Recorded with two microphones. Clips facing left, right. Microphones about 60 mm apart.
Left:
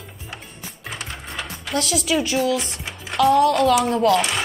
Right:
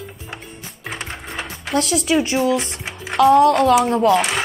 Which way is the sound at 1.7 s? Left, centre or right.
Right.